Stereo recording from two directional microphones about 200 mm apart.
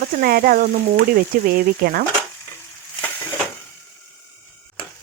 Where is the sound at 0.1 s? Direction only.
50° right (ahead or behind).